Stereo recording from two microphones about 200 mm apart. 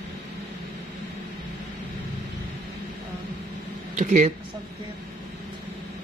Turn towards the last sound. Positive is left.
turn(degrees=-35)  # may be behind; listen again after turning